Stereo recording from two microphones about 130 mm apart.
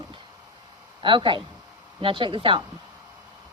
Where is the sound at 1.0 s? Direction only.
40° right (ahead or behind).